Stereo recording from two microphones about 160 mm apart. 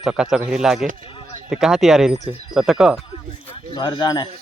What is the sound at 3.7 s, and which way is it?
Speech, 30° left (ahead or behind).